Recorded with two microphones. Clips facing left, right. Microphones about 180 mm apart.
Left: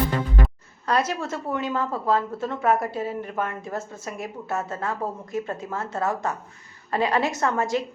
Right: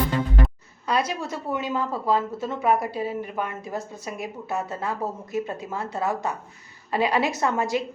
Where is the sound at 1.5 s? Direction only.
5° right (ahead or behind).